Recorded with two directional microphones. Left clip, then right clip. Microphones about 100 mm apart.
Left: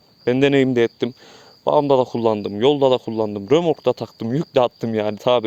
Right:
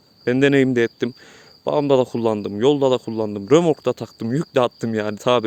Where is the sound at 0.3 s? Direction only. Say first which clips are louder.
Even; 35° right (ahead or behind).